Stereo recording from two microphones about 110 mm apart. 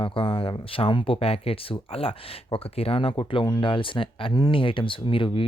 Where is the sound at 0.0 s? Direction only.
50° left (ahead or behind).